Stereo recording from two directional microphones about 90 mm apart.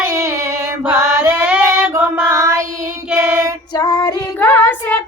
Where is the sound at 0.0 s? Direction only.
35° right (ahead or behind).